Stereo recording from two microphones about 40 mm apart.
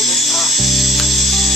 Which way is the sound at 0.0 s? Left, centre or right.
Centre.